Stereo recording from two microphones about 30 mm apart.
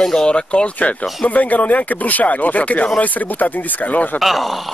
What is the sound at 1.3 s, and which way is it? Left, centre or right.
Speech, left.